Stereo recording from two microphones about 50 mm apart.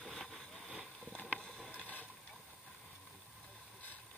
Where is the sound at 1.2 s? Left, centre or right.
Left.